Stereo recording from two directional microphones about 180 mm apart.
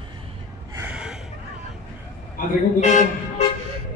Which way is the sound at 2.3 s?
45° left (ahead or behind).